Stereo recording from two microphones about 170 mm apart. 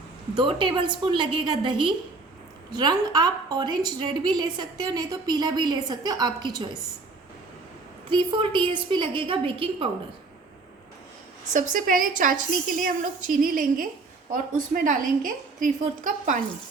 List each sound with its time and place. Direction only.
0.3 s a woman's voice: 30° right (ahead or behind)
8.1 s a woman's voice: 30° right (ahead or behind)
11.5 s a woman's voice: 50° right (ahead or behind)